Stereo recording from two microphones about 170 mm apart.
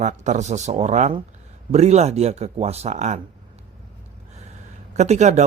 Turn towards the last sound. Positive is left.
turn(degrees=-40)  # may be behind; listen again after turning